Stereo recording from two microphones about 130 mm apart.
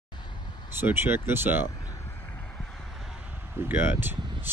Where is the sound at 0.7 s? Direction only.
15° right (ahead or behind).